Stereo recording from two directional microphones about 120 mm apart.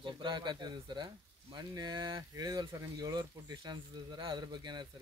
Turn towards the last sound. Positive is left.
turn(degrees=-35)  # may be behind; listen again after turning